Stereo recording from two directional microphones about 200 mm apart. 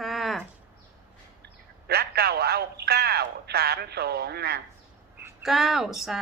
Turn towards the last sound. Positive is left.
turn(degrees=0)  # may be behind; listen again after turning